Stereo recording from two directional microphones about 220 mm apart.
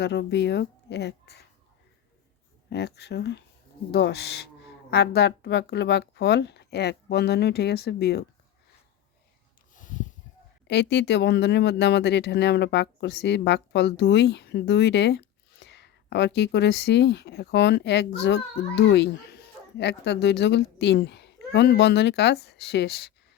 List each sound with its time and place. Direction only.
0.0 s speech: 50° left (ahead or behind)
2.6 s speech: 50° left (ahead or behind)
10.7 s speech: 50° left (ahead or behind)